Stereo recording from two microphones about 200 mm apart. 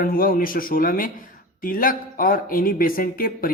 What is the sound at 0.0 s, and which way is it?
Speech, 45° left (ahead or behind).